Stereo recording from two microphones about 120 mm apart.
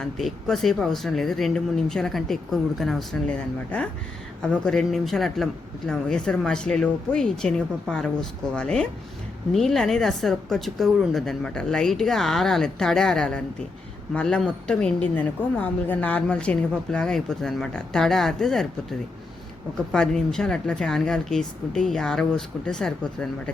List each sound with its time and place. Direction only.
0.0 s speech: 5° left (ahead or behind)